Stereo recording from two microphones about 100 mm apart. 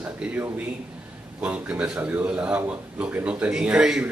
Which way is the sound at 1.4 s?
10° right (ahead or behind).